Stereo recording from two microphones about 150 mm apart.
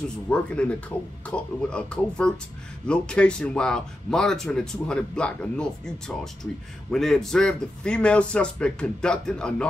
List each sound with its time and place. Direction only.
0.3 s a man's voice: 10° left (ahead or behind)